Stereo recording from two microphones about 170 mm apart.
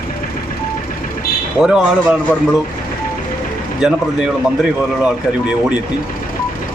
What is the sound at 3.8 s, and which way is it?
Speech, 5° right (ahead or behind).